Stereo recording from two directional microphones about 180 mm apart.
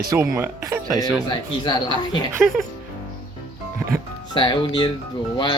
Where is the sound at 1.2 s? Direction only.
25° left (ahead or behind).